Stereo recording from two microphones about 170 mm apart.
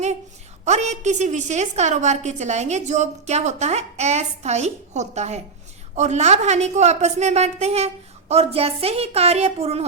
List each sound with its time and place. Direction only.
0.6 s a woman's voice: 40° right (ahead or behind)